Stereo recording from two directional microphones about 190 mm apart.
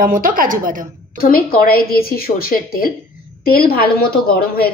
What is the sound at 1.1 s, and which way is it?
Speech, 50° left (ahead or behind).